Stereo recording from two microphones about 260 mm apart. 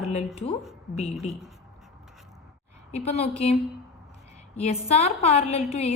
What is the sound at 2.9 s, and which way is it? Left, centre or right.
Speech, left.